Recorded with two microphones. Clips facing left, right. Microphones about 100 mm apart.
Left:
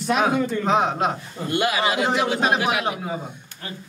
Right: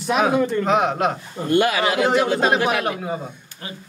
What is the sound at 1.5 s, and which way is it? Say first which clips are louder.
Speech: right 4 dB; 45° right (ahead or behind).